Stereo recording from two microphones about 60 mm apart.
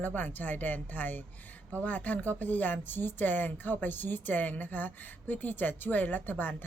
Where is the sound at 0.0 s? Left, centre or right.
Left.